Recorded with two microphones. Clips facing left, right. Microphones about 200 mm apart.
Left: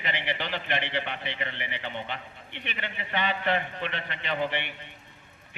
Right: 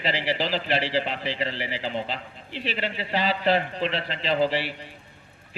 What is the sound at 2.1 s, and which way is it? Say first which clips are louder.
Speech: right 6 dB; 90° right.